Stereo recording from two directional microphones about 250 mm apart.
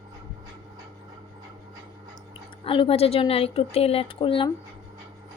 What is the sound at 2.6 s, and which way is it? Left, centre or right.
Speech, left.